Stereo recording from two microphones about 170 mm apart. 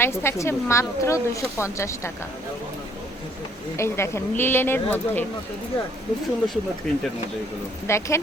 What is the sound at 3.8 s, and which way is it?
Speech, 15° left (ahead or behind).